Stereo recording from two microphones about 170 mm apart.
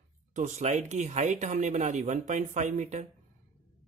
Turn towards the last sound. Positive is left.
turn(degrees=-45)  # may be behind; listen again after turning